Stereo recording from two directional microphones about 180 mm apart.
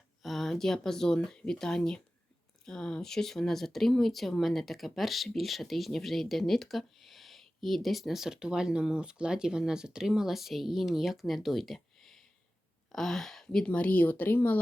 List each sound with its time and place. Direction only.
0.2 s a woman's voice: centre (ahead or behind)